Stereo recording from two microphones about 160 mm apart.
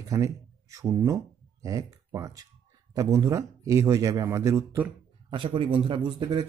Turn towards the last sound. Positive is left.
turn(degrees=-25)  # may be behind; listen again after turning